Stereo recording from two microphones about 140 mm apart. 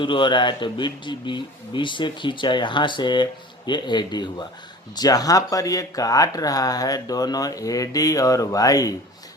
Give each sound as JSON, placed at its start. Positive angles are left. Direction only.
{"t": 0.0, "sound": "speech", "side_deg": 35}